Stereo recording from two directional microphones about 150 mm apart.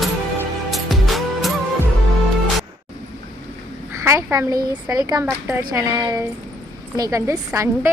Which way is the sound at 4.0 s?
15° right (ahead or behind).